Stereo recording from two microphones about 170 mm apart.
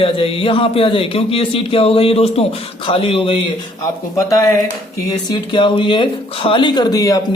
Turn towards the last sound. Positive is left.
turn(degrees=20)  # may be behind; listen again after turning